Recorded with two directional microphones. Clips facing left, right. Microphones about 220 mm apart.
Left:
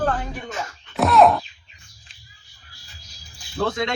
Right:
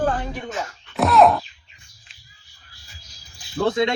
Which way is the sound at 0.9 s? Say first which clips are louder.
Even; centre (ahead or behind).